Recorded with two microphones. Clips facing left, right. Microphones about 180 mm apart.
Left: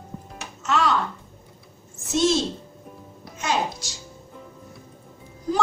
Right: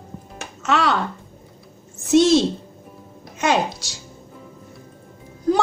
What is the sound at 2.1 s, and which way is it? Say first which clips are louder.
Speech: right 7 dB; 70° right (ahead or behind).